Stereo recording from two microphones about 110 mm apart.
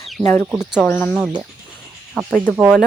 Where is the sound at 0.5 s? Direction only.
5° right (ahead or behind).